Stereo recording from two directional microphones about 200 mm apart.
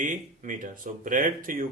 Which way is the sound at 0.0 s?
40° right (ahead or behind).